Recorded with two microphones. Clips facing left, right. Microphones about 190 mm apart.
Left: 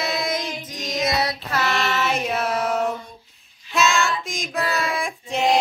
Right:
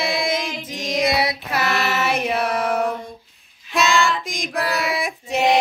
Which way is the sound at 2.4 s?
60° right (ahead or behind).